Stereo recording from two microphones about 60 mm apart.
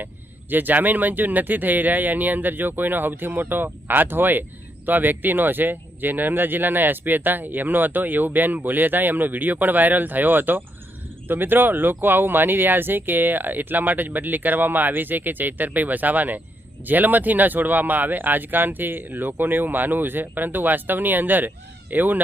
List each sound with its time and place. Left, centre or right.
0.5 s speech: right